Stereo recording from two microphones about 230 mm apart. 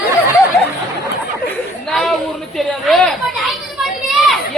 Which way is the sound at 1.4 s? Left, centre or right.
Centre.